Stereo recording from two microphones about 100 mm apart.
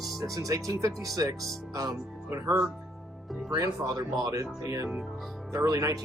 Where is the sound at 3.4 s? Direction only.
35° right (ahead or behind).